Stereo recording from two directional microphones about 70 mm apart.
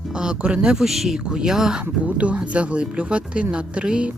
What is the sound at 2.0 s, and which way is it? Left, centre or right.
Speech, centre.